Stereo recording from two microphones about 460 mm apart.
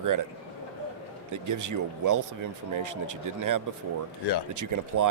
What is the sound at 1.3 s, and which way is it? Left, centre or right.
Speech, right.